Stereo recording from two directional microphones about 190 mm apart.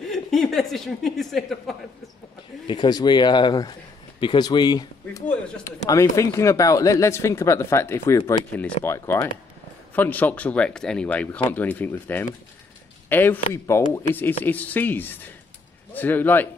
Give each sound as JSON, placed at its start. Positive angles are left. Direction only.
{"t": 0.0, "sound": "speech", "side_deg": 0}
{"t": 2.6, "sound": "speech", "side_deg": 25}